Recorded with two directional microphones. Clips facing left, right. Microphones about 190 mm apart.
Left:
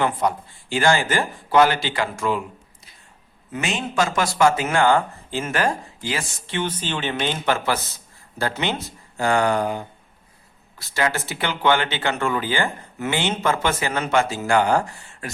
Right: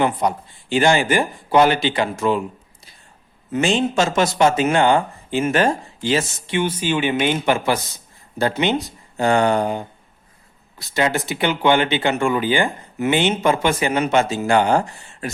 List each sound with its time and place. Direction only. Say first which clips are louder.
0.0 s speech: right 2 dB; 20° right (ahead or behind)
3.5 s speech: right 7 dB; 30° right (ahead or behind)
6.5 s speech: right 5 dB; 10° right (ahead or behind)